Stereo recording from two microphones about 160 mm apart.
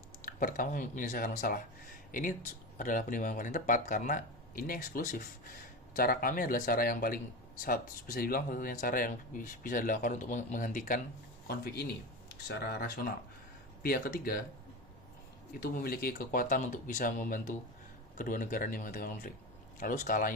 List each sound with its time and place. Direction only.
0.2 s speech: 60° left (ahead or behind)
11.4 s speech: 80° left
15.6 s speech: 70° left (ahead or behind)